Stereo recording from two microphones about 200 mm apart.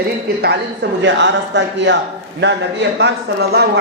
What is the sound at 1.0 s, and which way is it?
Speech, 65° right (ahead or behind).